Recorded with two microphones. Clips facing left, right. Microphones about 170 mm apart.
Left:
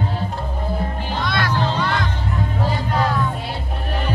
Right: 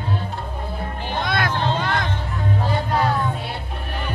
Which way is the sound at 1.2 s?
50° right (ahead or behind).